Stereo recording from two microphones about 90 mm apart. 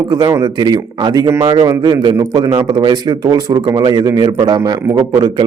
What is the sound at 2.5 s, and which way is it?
A man's voice, 45° right (ahead or behind).